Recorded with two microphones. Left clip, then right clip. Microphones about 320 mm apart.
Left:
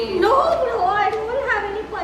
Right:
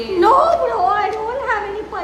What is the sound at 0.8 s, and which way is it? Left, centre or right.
Speech, centre.